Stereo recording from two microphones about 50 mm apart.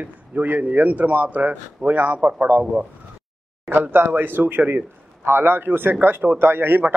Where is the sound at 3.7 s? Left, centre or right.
Right.